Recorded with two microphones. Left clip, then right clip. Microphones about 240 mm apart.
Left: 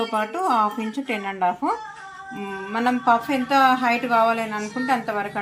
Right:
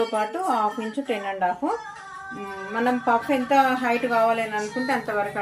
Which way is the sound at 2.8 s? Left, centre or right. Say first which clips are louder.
Left 2 dB; left.